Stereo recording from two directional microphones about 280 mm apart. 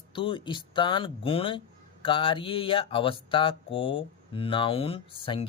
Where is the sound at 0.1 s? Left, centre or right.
Centre.